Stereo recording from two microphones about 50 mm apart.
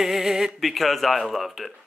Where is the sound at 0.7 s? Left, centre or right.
Centre.